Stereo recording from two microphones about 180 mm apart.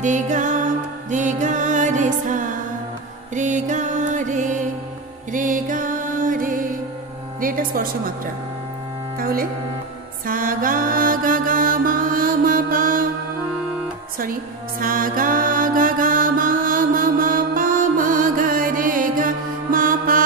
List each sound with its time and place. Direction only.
0.0 s music: 45° right (ahead or behind)
7.3 s speech: 50° right (ahead or behind)
9.2 s speech: 55° right (ahead or behind)
10.2 s mantra: 50° right (ahead or behind)
14.8 s music: 50° right (ahead or behind)